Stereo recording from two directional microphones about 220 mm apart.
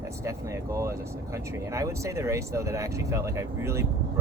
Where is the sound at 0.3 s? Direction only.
15° right (ahead or behind).